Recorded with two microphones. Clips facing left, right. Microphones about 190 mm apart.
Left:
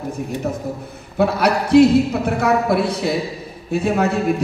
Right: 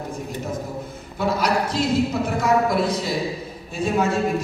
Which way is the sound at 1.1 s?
65° left (ahead or behind).